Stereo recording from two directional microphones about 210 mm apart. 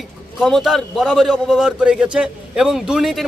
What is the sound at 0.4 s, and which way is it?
Speech, centre (ahead or behind).